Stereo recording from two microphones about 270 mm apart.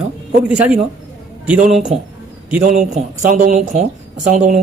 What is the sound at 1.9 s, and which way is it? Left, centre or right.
Speech, right.